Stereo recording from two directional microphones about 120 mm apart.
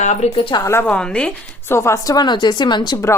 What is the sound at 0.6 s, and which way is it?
Speech, 20° left (ahead or behind).